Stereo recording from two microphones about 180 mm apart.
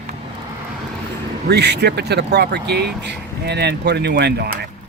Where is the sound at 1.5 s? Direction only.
65° right (ahead or behind).